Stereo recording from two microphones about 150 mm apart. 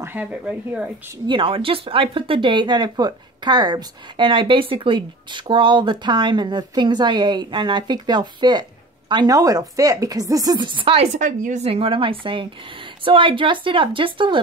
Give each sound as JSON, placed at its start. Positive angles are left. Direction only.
{"t": 0.0, "sound": "a woman's voice", "side_deg": -10}
{"t": 1.2, "sound": "speech", "side_deg": -35}
{"t": 11.1, "sound": "speech", "side_deg": -55}
{"t": 11.6, "sound": "speech", "side_deg": -40}